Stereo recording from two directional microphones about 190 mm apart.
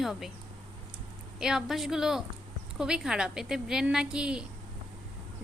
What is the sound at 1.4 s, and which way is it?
A woman's voice, 5° right (ahead or behind).